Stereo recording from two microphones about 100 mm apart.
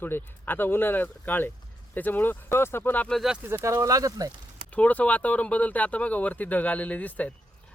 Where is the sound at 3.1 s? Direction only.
5° right (ahead or behind).